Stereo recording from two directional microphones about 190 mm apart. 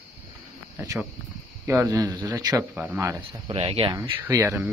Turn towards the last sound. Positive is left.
turn(degrees=-15)  # may be behind; listen again after turning